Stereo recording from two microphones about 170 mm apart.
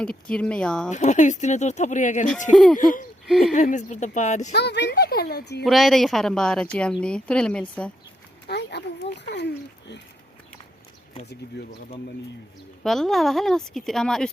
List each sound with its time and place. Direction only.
0.0 s speech: 5° left (ahead or behind)
0.9 s speech: 45° left (ahead or behind)
2.5 s speech: 5° left (ahead or behind)
2.7 s speech: 55° left (ahead or behind)
3.2 s speech: centre (ahead or behind)
3.5 s speech: 45° left (ahead or behind)
4.5 s speech: 90° left; by 5.6 s 75° left (ahead or behind)
5.6 s speech: centre (ahead or behind)
8.4 s speech: 80° left
11.6 s speech: 90° left
12.8 s speech: centre (ahead or behind)